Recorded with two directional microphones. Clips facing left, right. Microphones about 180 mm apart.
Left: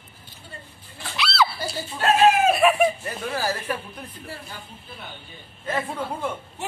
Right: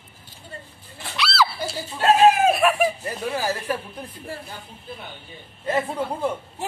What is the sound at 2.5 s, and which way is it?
Speech, centre (ahead or behind).